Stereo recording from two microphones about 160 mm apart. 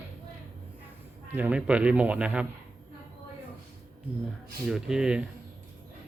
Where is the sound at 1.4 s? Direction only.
5° right (ahead or behind).